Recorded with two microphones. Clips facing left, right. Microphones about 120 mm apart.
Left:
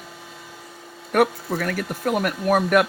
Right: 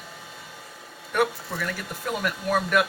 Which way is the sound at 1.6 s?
60° left (ahead or behind).